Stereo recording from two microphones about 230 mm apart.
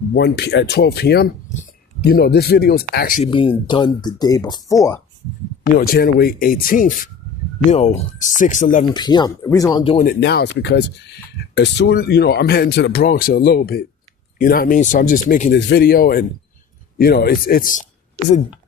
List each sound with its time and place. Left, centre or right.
0.1 s speech: left
3.2 s speech: left
5.7 s speech: left
8.8 s speech: centre
10.1 s speech: left